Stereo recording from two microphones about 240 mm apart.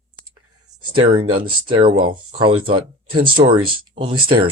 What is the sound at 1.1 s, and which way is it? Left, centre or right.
Speech, right.